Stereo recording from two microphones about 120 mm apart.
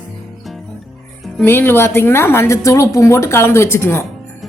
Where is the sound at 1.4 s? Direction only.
20° left (ahead or behind).